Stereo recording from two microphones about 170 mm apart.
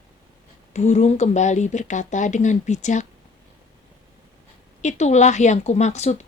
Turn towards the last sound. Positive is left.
turn(degrees=40)  # may be behind; listen again after turning